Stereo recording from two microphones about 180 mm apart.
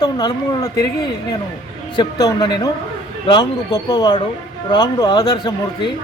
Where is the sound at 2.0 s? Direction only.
20° left (ahead or behind).